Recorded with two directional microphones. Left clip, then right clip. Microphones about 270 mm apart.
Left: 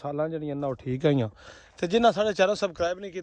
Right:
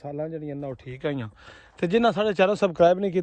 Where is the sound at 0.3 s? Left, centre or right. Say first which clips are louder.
Left 2 dB; centre.